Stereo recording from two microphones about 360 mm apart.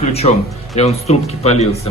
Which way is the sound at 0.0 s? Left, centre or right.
Centre.